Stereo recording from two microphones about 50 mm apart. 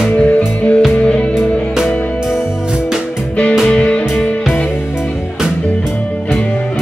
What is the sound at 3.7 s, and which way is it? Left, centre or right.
Music, left.